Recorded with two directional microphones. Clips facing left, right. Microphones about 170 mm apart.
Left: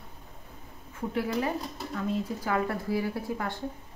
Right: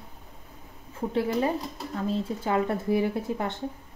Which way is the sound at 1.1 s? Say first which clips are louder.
Right 4 dB; 25° right (ahead or behind).